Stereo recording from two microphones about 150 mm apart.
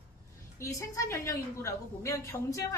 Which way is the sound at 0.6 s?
20° left (ahead or behind).